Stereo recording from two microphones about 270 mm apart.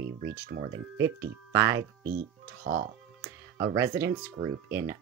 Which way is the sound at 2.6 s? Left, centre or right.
Right.